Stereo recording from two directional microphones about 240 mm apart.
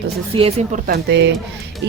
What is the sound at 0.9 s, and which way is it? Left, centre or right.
Speech, right.